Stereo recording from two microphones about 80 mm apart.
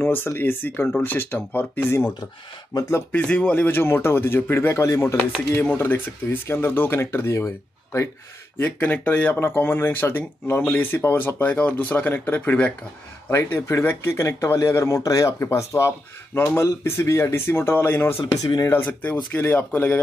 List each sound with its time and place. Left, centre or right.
0.0 s speech: left
5.8 s speech: left
8.5 s speech: left
13.3 s speech: left
18.2 s speech: left
18.7 s speech: left